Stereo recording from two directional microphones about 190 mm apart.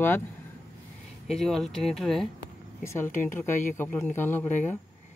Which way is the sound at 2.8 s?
15° left (ahead or behind).